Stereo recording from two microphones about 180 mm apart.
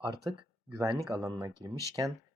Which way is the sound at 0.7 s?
15° right (ahead or behind).